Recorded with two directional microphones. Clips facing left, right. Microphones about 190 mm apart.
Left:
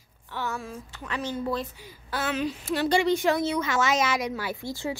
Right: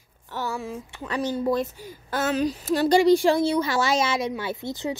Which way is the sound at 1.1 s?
40° right (ahead or behind).